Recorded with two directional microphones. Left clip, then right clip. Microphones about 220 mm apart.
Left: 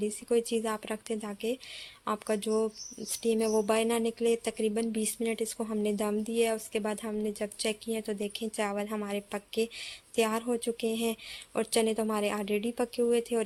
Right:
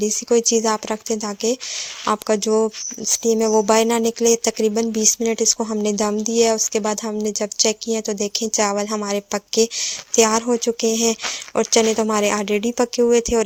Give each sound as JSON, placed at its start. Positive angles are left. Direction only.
{"t": 0.0, "sound": "speech", "side_deg": -30}